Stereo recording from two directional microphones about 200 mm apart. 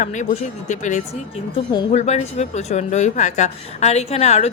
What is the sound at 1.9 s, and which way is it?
Speech, 35° left (ahead or behind).